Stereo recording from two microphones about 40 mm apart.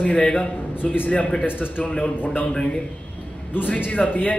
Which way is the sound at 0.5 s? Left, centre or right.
Left.